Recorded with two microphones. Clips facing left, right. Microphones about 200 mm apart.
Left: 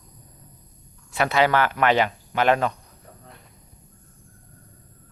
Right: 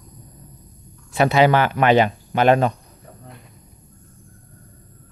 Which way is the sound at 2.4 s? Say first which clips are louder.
Right 4 dB; 40° right (ahead or behind).